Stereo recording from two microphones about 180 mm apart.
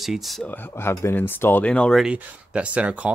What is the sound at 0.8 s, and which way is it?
Speech, 15° left (ahead or behind).